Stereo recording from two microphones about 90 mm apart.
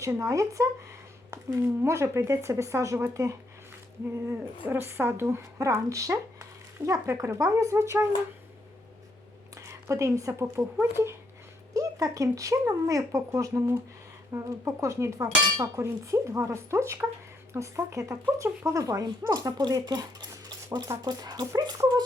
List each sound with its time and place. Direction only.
0.0 s speech: 35° right (ahead or behind)
4.6 s speech: 25° right (ahead or behind)
9.6 s a woman's voice: 35° right (ahead or behind)
11.7 s speech: 40° right (ahead or behind)